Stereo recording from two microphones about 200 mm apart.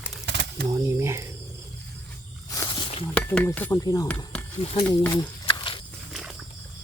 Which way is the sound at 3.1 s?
5° left (ahead or behind).